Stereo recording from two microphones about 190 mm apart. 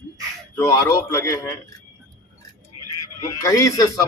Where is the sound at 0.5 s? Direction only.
15° left (ahead or behind).